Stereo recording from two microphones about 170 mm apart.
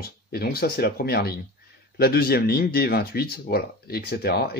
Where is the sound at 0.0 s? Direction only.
65° left (ahead or behind).